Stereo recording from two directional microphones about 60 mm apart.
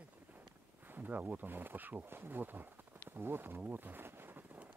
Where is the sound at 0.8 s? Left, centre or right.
Right.